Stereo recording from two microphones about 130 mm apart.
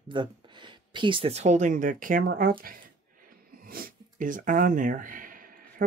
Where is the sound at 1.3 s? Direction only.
65° right (ahead or behind); by 2.4 s 90° right.